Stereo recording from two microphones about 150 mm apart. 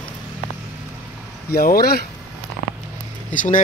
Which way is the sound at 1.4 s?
80° left.